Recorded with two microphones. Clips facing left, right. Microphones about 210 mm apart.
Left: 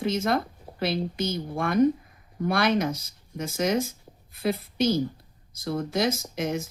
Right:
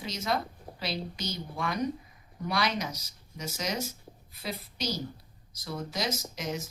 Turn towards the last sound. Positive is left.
turn(degrees=55)  # may be behind; listen again after turning